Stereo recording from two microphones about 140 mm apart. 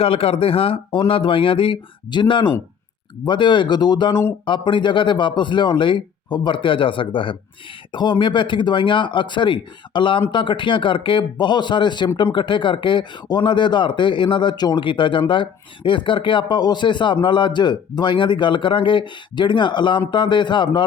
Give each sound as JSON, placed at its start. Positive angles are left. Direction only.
{"t": 0.0, "sound": "speech", "side_deg": 45}